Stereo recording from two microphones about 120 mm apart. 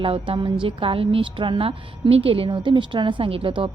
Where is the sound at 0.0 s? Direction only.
45° right (ahead or behind).